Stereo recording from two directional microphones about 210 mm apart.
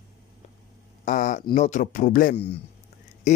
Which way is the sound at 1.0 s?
40° left (ahead or behind).